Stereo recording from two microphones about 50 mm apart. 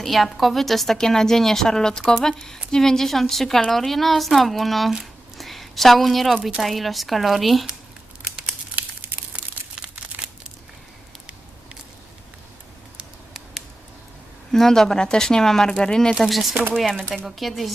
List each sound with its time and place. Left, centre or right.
0.0 s a woman's voice: centre
8.7 s crumpling: right
9.3 s crumpling: right
14.5 s a woman's voice: centre
16.1 s speech: centre
16.7 s a woman's voice: centre
17.2 s speech: centre